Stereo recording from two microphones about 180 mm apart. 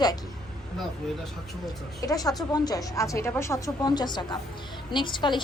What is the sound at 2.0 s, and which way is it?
A woman's voice, 20° left (ahead or behind).